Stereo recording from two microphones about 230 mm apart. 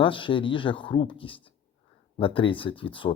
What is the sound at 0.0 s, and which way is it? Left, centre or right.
Speech, left.